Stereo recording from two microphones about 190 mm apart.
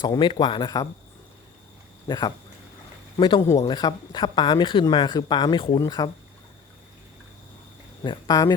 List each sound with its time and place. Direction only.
0.0 s speech: 25° left (ahead or behind)
2.0 s speech: 20° left (ahead or behind)
8.0 s speech: 20° left (ahead or behind)